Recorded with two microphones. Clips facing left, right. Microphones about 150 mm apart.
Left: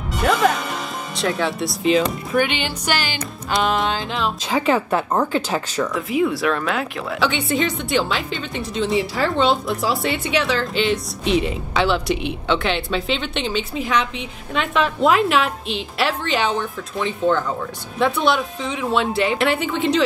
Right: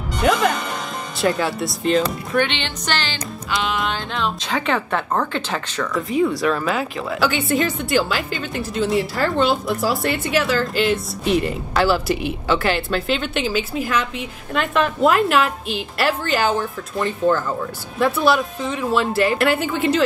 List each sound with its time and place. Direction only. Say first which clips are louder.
0.2 s speech: even; centre (ahead or behind)
3.4 s music: left 4 dB; 45° left (ahead or behind)
4.1 s speech: left 1 dB; 5° left (ahead or behind)